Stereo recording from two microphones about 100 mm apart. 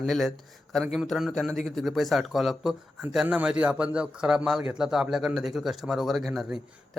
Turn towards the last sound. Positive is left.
turn(degrees=0)  # may be behind; listen again after turning